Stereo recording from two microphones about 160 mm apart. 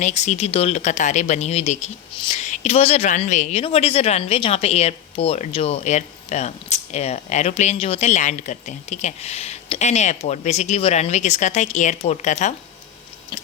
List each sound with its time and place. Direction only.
0.0 s a woman's voice: 45° left (ahead or behind)